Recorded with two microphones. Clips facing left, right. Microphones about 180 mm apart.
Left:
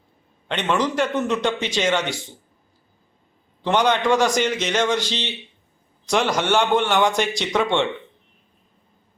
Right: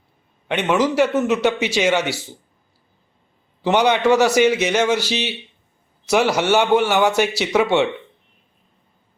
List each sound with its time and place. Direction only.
0.4 s a man's voice: 5° right (ahead or behind)
3.6 s a man's voice: 10° right (ahead or behind)